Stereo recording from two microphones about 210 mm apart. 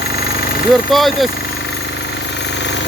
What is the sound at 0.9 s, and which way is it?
Speech, centre (ahead or behind).